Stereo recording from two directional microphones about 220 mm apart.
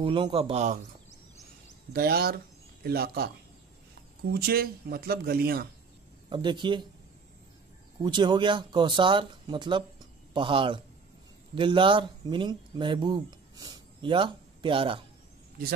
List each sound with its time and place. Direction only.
0.0 s speech: 25° right (ahead or behind)
2.0 s speech: 45° right (ahead or behind)
4.3 s speech: 45° right (ahead or behind)
6.3 s speech: 20° right (ahead or behind)
8.0 s speech: 20° right (ahead or behind)